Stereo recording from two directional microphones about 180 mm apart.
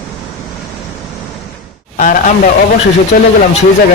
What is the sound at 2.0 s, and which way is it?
Speech, 45° left (ahead or behind).